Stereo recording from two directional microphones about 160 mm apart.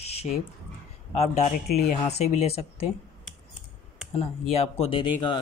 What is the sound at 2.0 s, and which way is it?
Speech, 40° left (ahead or behind).